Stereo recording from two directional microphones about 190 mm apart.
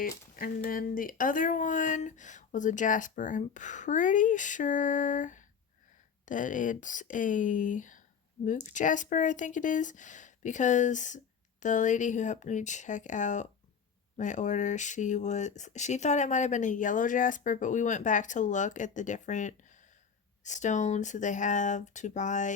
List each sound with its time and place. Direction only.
0.3 s speech: 50° left (ahead or behind)